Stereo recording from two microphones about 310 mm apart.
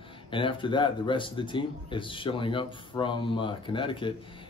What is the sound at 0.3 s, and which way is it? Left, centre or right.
Speech, centre.